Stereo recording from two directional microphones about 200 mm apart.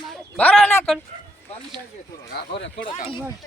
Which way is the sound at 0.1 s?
5° left (ahead or behind).